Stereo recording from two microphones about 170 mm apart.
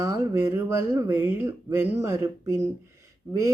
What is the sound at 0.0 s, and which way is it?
Speech, 15° right (ahead or behind).